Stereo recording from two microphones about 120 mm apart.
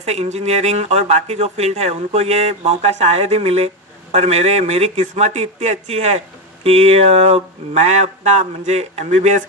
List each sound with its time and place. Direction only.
0.0 s a man's voice: 65° right (ahead or behind); by 9.4 s 80° right